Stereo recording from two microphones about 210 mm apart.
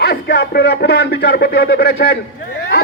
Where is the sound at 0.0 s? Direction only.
50° left (ahead or behind).